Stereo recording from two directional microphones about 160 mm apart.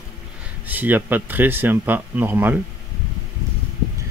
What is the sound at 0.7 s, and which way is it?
Speech, 10° right (ahead or behind).